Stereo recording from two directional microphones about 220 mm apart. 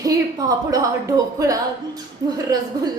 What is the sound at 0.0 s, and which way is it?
A woman's voice, 15° right (ahead or behind).